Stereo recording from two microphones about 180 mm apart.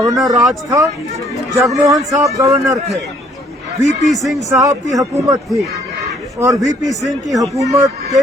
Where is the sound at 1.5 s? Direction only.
20° right (ahead or behind).